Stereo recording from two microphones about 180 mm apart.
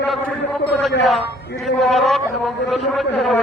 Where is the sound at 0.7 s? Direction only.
Centre (ahead or behind).